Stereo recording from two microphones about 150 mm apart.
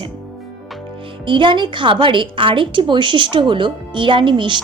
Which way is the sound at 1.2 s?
30° right (ahead or behind).